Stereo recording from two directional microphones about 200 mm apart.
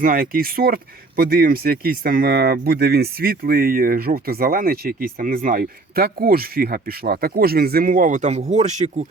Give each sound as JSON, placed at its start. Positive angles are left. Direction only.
{"t": 0.0, "sound": "speech", "side_deg": -45}